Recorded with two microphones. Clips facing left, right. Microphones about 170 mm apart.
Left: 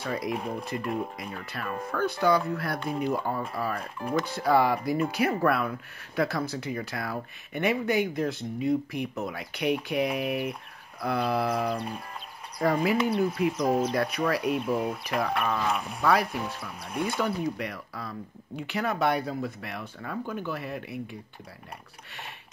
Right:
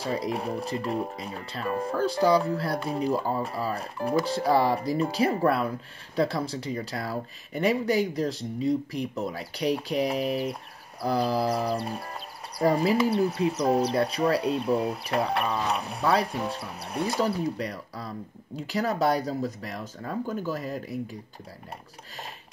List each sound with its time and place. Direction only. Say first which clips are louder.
0.0 s speech: right 2 dB; 30° right (ahead or behind)